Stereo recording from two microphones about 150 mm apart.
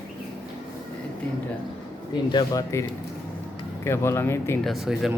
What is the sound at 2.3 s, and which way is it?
Speech, 25° left (ahead or behind).